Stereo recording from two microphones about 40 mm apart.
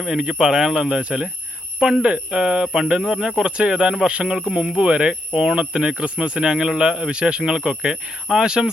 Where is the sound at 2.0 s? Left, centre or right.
Right.